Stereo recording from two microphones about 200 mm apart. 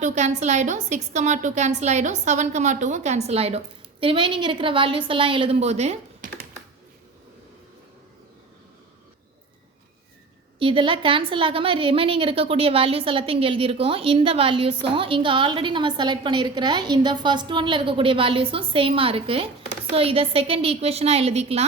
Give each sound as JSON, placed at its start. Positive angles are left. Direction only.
{"t": 0.0, "sound": "a woman's voice", "side_deg": -35}
{"t": 10.6, "sound": "a woman's voice", "side_deg": -25}